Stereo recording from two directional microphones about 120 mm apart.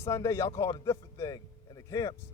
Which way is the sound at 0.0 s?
25° left (ahead or behind).